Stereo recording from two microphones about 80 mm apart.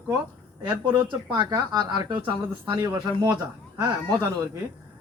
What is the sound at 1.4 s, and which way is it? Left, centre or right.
Speech, right.